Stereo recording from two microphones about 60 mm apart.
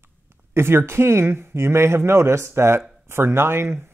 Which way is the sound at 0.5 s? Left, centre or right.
Right.